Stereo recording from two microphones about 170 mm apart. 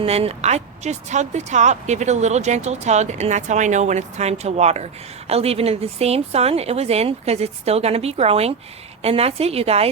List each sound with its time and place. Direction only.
0.0 s a woman's voice: 35° right (ahead or behind)